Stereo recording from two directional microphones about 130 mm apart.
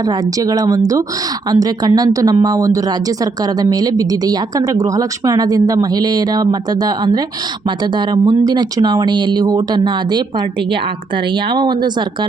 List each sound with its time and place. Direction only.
0.0 s speech: 30° right (ahead or behind)
11.5 s speech: 35° right (ahead or behind)